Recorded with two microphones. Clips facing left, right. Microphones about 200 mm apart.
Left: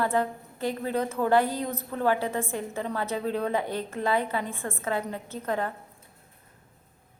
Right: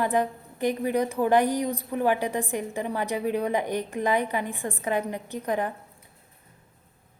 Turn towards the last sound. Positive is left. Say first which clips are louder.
# right 2 dB
turn(degrees=-15)  # may be behind; listen again after turning